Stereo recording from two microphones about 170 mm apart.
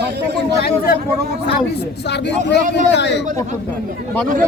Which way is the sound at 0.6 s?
65° left (ahead or behind).